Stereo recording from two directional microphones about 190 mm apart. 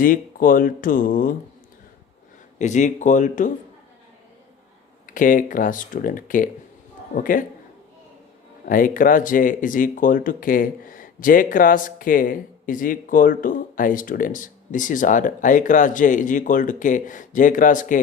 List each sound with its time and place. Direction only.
0.0 s speech: 45° left (ahead or behind)
2.6 s speech: 40° left (ahead or behind)
5.0 s speech: 45° left (ahead or behind)
8.6 s speech: 45° left (ahead or behind)